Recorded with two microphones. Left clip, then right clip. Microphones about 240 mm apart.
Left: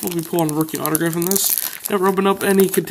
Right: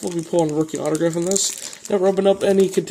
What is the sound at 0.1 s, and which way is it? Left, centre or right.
Speech, centre.